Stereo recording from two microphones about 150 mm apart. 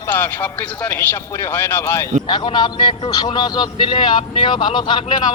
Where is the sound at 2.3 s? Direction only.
30° left (ahead or behind).